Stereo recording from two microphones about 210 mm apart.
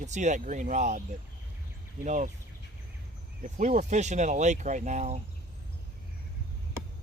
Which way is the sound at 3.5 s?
35° right (ahead or behind).